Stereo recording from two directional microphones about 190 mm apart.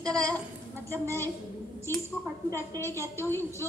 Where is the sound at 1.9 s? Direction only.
15° left (ahead or behind).